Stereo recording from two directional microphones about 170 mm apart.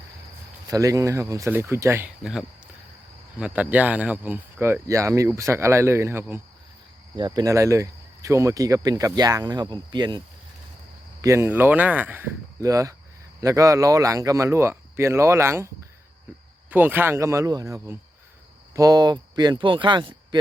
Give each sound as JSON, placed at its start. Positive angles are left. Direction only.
{"t": 0.7, "sound": "speech", "side_deg": -20}
{"t": 2.2, "sound": "speech", "side_deg": 0}
{"t": 7.2, "sound": "speech", "side_deg": -25}